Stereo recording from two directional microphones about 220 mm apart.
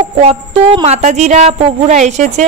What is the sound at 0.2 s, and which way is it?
A woman's voice, 25° right (ahead or behind).